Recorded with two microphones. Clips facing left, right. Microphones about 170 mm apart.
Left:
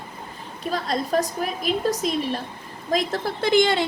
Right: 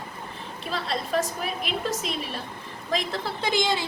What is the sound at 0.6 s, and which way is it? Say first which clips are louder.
A woman's voice: left 5 dB; 40° left (ahead or behind).